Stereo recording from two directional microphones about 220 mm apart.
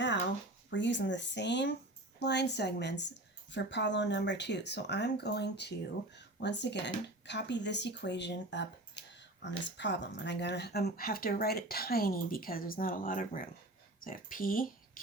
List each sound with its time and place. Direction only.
0.7 s speech: 55° left (ahead or behind)
15.0 s music: 40° left (ahead or behind)